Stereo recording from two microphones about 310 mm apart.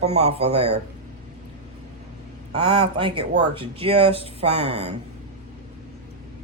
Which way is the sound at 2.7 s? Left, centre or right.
Centre.